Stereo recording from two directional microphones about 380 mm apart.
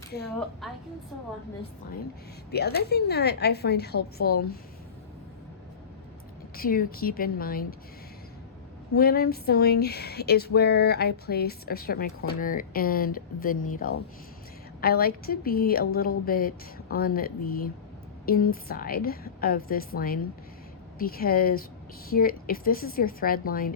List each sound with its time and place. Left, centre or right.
0.3 s a woman's voice: centre
2.5 s speech: left
6.6 s speech: left
9.0 s speech: left